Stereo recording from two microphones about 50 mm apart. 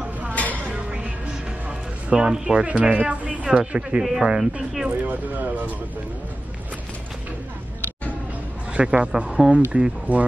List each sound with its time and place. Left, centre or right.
0.3 s a sound: left
0.7 s music: right
1.7 s a man's voice: centre
4.0 s speech: centre
5.0 s speech: right
8.7 s a man's voice: right